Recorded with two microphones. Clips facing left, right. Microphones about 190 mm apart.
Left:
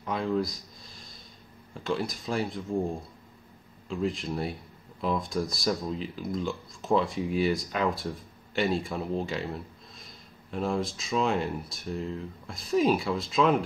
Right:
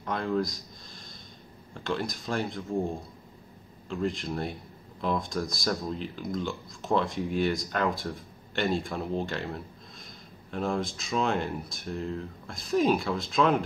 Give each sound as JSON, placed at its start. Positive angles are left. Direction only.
{"t": 0.0, "sound": "speech", "side_deg": 5}
{"t": 3.9, "sound": "speech", "side_deg": 5}